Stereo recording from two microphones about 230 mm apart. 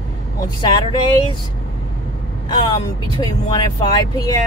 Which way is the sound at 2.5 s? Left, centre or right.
Centre.